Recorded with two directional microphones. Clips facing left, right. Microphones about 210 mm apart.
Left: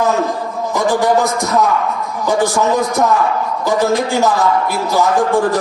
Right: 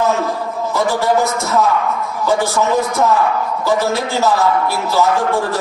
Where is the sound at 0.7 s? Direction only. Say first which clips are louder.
Left 2 dB; 15° left (ahead or behind).